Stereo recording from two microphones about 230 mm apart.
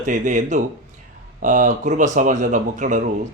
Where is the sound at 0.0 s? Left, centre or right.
Right.